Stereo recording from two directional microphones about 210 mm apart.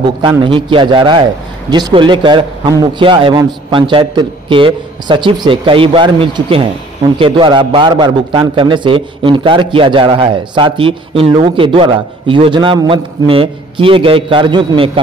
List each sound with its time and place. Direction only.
0.0 s a man's voice: 20° right (ahead or behind)